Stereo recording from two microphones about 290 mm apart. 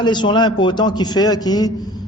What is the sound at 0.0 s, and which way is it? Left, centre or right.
A man's voice, centre.